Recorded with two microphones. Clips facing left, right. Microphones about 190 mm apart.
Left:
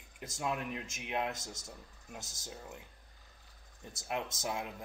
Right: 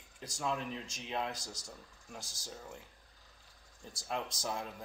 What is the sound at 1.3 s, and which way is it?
Speech, 25° left (ahead or behind).